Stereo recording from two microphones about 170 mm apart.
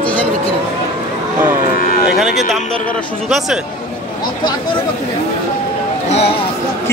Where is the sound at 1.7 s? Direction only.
60° left (ahead or behind).